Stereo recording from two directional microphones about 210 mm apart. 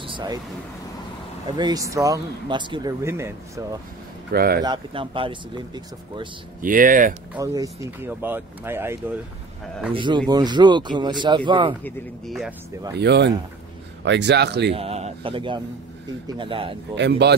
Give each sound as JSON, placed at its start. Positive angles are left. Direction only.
{"t": 0.0, "sound": "a sound", "side_deg": -20}
{"t": 1.6, "sound": "speech", "side_deg": -15}
{"t": 4.3, "sound": "speech", "side_deg": -45}
{"t": 4.6, "sound": "speech", "side_deg": -25}
{"t": 6.6, "sound": "speech", "side_deg": -40}
{"t": 7.3, "sound": "speech", "side_deg": -15}
{"t": 9.9, "sound": "speech", "side_deg": -20}
{"t": 11.8, "sound": "speech", "side_deg": 0}
{"t": 13.0, "sound": "speech", "side_deg": -55}
{"t": 14.7, "sound": "speech", "side_deg": -30}
{"t": 16.9, "sound": "speech", "side_deg": -55}